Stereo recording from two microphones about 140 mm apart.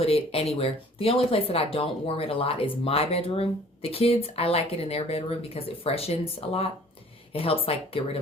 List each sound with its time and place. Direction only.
0.0 s speech: 45° left (ahead or behind)